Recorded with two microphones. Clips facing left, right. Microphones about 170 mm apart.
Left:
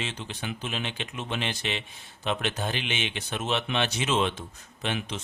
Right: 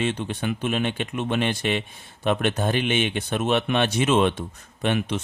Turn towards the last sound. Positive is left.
turn(degrees=-55)  # may be behind; listen again after turning